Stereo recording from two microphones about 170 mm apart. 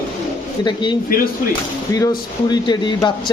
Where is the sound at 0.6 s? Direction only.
25° left (ahead or behind).